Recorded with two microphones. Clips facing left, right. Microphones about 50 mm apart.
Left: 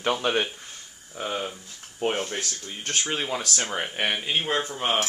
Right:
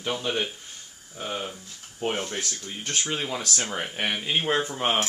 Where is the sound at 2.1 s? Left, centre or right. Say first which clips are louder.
Left 1 dB; centre.